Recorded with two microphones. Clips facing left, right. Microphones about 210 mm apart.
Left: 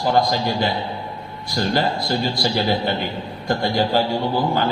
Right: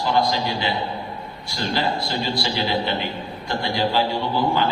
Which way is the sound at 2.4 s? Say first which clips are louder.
Left 3 dB; 45° left (ahead or behind).